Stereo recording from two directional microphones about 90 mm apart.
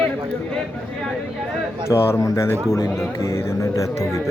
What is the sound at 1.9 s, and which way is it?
Speech, 30° left (ahead or behind).